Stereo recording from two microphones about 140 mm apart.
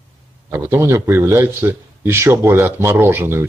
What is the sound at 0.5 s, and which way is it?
A man's voice, 15° right (ahead or behind).